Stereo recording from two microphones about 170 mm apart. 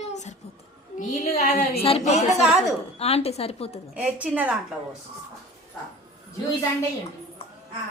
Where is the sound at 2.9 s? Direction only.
35° left (ahead or behind).